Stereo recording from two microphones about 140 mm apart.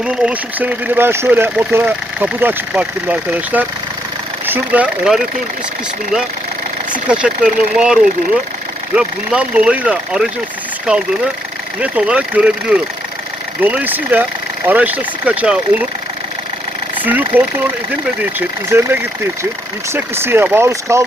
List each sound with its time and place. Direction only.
0.0 s speech: 10° right (ahead or behind)
6.9 s speech: 5° right (ahead or behind)
9.0 s speech: 10° right (ahead or behind)
11.8 s speech: 10° right (ahead or behind)
17.0 s speech: 10° right (ahead or behind)